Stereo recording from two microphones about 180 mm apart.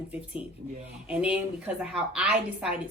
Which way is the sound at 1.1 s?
5° right (ahead or behind).